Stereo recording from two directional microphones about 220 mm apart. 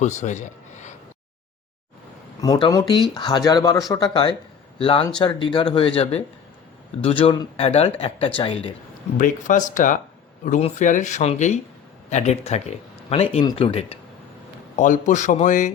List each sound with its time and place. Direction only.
0.0 s speech: 30° left (ahead or behind)
2.4 s speech: 20° left (ahead or behind)
9.1 s speech: 35° left (ahead or behind)